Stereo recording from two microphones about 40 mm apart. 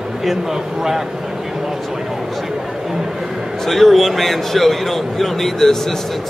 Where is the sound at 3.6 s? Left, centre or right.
Centre.